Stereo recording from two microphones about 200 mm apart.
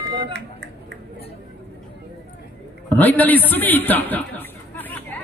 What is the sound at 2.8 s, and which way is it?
A man's voice, 10° left (ahead or behind).